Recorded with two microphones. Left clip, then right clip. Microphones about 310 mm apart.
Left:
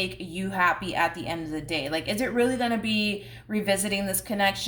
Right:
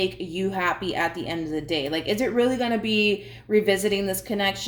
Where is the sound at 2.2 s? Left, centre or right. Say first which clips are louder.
Right 2 dB; left.